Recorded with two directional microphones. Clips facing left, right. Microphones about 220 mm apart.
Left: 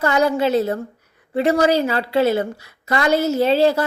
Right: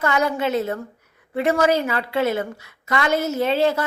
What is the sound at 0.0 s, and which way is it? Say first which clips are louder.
A woman's voice: left 4 dB; 35° left (ahead or behind).